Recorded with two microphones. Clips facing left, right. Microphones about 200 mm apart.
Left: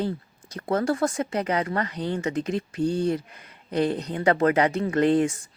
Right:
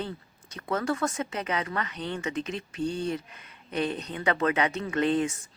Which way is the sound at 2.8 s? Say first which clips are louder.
Left 5 dB; 10° left (ahead or behind).